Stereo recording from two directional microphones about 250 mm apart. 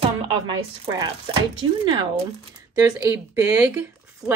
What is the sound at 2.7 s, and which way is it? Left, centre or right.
Speech, centre.